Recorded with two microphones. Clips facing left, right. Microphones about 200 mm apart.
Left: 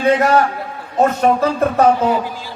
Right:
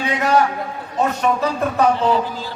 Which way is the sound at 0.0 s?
45° left (ahead or behind).